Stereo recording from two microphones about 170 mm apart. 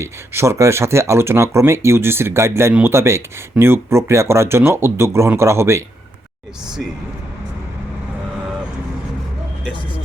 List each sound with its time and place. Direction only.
0.0 s speech: 15° right (ahead or behind)